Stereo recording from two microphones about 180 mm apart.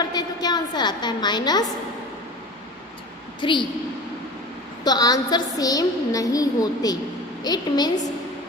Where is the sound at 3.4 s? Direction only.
25° left (ahead or behind).